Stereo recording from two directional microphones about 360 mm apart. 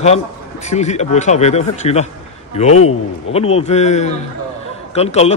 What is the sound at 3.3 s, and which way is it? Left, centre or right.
A man's voice, centre.